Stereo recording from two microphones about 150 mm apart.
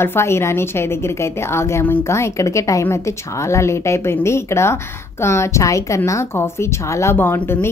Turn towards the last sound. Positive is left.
turn(degrees=15)  # may be behind; listen again after turning